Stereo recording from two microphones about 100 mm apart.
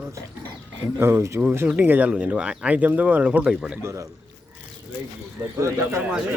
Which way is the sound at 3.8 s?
30° right (ahead or behind).